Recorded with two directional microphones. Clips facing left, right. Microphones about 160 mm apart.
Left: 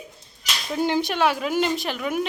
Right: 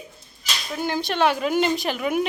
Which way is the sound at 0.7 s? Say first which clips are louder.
Left 4 dB; 20° left (ahead or behind).